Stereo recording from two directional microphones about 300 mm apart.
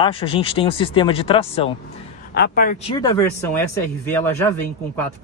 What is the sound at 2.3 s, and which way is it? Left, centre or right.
Speech, left.